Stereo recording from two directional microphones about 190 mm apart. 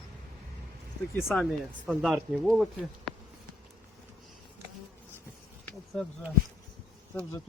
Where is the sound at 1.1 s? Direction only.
Centre (ahead or behind).